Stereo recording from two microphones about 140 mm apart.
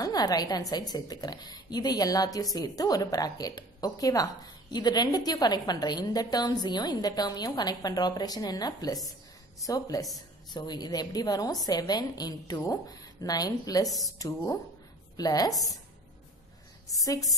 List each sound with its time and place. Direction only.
0.0 s a woman's voice: 25° left (ahead or behind)
17.0 s a woman's voice: 25° left (ahead or behind)